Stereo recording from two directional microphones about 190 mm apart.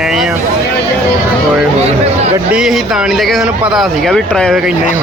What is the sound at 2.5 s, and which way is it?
Speech, 5° right (ahead or behind).